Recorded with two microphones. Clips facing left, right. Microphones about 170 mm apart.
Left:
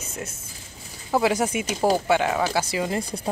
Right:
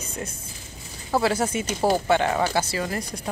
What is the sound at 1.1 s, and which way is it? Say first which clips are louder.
Speech: left 1 dB; 15° left (ahead or behind).